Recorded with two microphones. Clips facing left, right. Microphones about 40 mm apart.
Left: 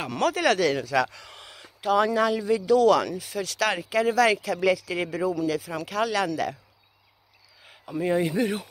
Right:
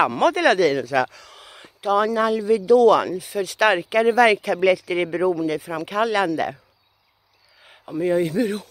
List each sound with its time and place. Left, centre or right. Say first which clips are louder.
0.2 s speech: right 6 dB; right
0.5 s speech: right 5 dB; centre
1.1 s speech: even; centre
1.8 s speech: right 2 dB; centre
3.5 s speech: right 7 dB; right
4.4 s speech: right 5 dB; right
7.6 s a sound: right 3 dB; centre
7.9 s a man's voice: right 4 dB; centre